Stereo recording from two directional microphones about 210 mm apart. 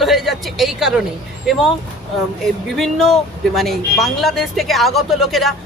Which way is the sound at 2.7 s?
Centre (ahead or behind).